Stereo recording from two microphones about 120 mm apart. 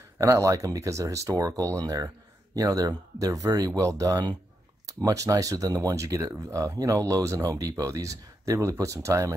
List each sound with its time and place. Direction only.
0.2 s speech: 25° right (ahead or behind)